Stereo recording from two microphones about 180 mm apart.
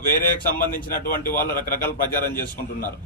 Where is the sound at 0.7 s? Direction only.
50° left (ahead or behind).